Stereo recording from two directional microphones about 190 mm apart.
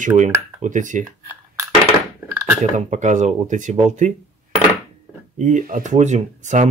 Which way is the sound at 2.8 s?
40° right (ahead or behind).